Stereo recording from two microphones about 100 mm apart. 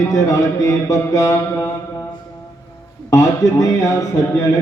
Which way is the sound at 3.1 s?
30° left (ahead or behind).